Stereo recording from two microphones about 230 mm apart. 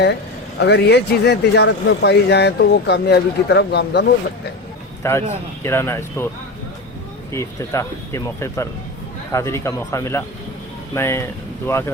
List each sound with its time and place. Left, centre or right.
0.6 s speech: left
5.0 s speech: centre
7.3 s speech: centre